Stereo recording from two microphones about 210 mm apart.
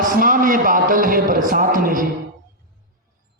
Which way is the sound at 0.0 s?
40° right (ahead or behind).